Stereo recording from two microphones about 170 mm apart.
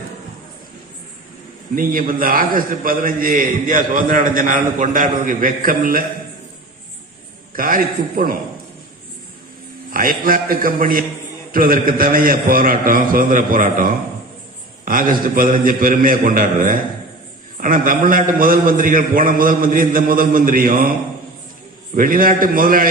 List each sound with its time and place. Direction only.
1.7 s a man's voice: 55° right (ahead or behind)
7.5 s a man's voice: 55° right (ahead or behind)
9.9 s a man's voice: 55° right (ahead or behind)
21.9 s a man's voice: 55° right (ahead or behind)